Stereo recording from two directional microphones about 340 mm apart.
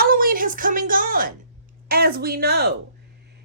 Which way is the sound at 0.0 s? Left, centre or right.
Right.